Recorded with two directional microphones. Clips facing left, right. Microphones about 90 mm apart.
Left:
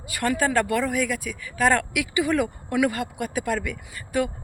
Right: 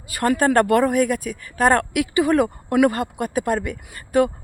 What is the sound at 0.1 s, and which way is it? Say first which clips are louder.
A woman's voice: right 5 dB; 40° right (ahead or behind).